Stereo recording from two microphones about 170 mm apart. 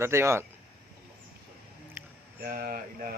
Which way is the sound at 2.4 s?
60° right (ahead or behind).